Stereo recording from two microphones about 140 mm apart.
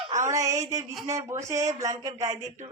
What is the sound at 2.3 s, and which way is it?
Speech, 60° right (ahead or behind).